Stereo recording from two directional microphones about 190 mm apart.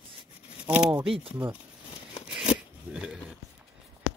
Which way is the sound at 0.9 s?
30° right (ahead or behind).